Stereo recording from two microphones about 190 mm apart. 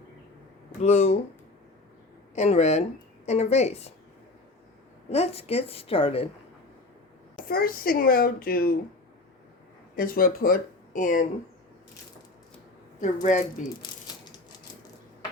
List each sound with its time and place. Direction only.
0.8 s a woman's voice: 35° left (ahead or behind)
2.3 s a woman's voice: 35° left (ahead or behind)
5.0 s a woman's voice: 35° left (ahead or behind)
7.3 s speech: 50° left (ahead or behind)
9.9 s speech: 50° left (ahead or behind)
13.0 s a woman's voice: 40° left (ahead or behind)
14.1 s typewriter: 25° left (ahead or behind)